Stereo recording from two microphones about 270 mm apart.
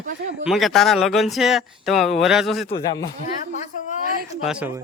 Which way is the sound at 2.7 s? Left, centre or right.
Centre.